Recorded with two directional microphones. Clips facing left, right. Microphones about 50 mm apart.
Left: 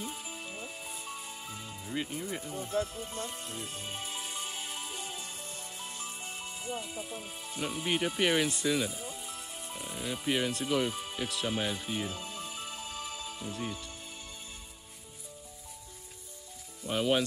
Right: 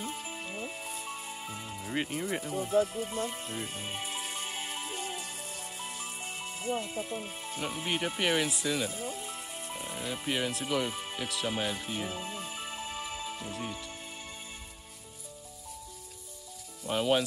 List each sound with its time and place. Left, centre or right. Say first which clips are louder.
0.1 s music: right 3 dB; right
2.6 s speech: right 6 dB; right
3.8 s music: right 2 dB; right
5.5 s music: right 2 dB; right
7.2 s speech: right 1 dB; centre
9.3 s music: right 2 dB; right
9.8 s music: right 1 dB; centre
10.2 s speech: left 2 dB; centre
10.9 s music: even; centre
11.1 s speech: right 1 dB; centre
12.1 s music: right 2 dB; right
13.5 s speech: even; centre
16.8 s speech: right 1 dB; centre